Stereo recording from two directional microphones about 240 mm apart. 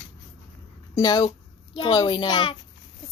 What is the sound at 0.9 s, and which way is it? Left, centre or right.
A child's voice, centre.